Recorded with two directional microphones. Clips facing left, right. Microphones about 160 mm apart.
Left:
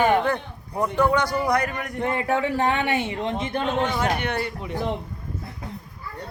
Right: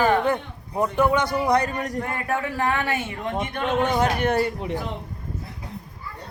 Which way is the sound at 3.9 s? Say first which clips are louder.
Right 4 dB; 45° right (ahead or behind).